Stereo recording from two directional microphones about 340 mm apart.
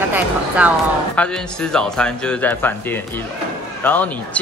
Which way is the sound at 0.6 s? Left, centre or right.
Centre.